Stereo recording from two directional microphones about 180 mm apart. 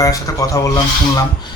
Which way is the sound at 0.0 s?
20° left (ahead or behind).